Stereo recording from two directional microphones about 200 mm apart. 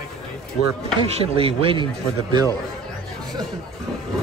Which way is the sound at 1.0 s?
25° right (ahead or behind).